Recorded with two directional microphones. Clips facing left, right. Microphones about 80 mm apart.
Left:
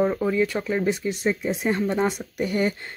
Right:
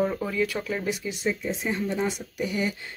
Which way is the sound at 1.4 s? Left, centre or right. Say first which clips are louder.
Left 5 dB; left.